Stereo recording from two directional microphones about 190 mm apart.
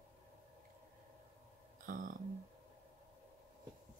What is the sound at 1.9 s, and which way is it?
Speech, 45° right (ahead or behind).